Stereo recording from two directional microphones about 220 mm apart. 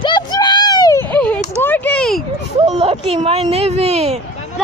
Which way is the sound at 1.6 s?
10° left (ahead or behind).